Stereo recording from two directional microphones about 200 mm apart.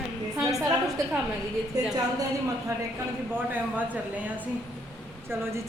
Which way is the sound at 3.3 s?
10° right (ahead or behind).